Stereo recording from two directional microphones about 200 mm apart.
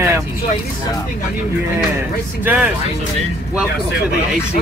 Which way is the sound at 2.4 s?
10° right (ahead or behind).